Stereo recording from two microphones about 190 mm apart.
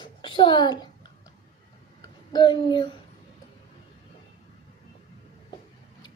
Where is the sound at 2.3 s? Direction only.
25° left (ahead or behind).